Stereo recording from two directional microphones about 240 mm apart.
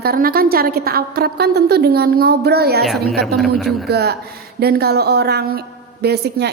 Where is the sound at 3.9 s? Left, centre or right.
Right.